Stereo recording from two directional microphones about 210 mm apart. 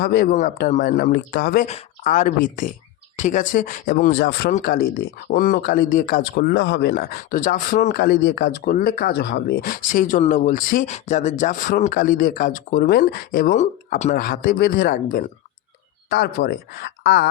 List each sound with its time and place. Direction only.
0.0 s speech: 45° left (ahead or behind)
1.6 s speech: 35° left (ahead or behind)
7.9 s speech: 50° left (ahead or behind)